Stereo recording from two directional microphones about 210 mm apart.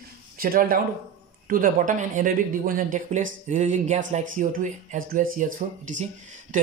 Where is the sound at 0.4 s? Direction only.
45° right (ahead or behind).